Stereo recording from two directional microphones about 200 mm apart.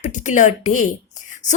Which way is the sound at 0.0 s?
40° left (ahead or behind).